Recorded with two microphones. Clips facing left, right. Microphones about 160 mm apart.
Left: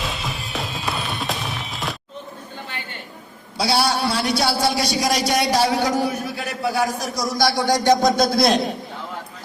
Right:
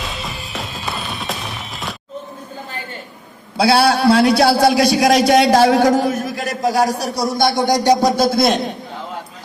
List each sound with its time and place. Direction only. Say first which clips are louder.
0.0 s music: even; centre (ahead or behind)
3.6 s a man's voice: right 7 dB; 60° right (ahead or behind); by 7.4 s 30° right (ahead or behind)
7.6 s a sound: right 2 dB; 15° right (ahead or behind)